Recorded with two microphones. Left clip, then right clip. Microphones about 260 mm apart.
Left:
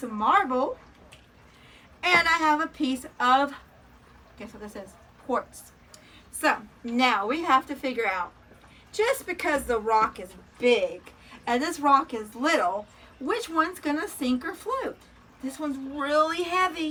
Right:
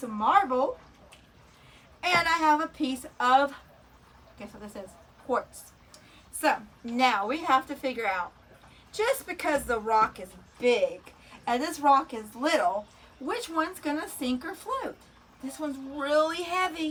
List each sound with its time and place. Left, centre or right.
0.0 s a woman's voice: right
2.0 s a woman's voice: centre
6.4 s a woman's voice: centre